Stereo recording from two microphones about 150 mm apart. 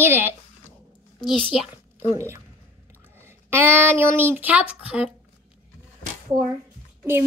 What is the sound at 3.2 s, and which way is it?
A woman's voice, 15° right (ahead or behind).